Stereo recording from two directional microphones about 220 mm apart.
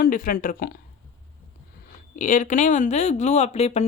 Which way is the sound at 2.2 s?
35° left (ahead or behind).